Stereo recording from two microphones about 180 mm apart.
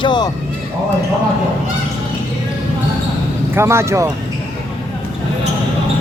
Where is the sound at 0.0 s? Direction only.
25° left (ahead or behind).